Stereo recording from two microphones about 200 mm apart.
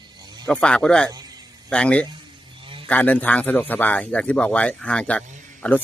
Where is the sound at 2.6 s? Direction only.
25° right (ahead or behind).